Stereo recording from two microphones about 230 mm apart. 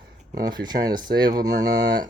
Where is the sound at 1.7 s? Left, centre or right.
Right.